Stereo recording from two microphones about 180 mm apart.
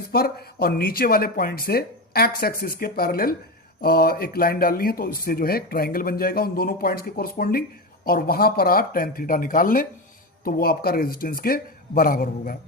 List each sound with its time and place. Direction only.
0.1 s speech: 60° left (ahead or behind)